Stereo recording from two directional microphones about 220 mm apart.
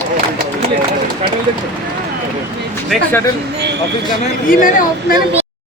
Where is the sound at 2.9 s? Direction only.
10° left (ahead or behind).